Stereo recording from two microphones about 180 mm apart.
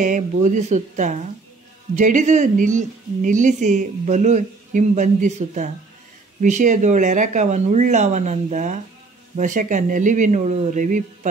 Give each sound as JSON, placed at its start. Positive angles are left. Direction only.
{"t": 0.0, "sound": "speech", "side_deg": -45}